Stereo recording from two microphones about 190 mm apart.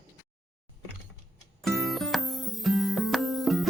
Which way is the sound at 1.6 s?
Centre (ahead or behind).